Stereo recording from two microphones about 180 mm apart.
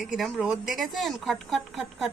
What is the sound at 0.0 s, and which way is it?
A woman's voice, centre (ahead or behind).